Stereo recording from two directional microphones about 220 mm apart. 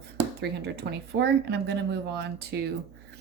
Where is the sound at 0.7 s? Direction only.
50° right (ahead or behind).